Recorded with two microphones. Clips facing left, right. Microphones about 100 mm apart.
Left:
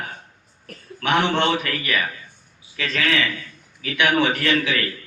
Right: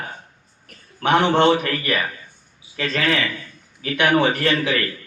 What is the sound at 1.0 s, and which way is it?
A man's voice, 40° right (ahead or behind).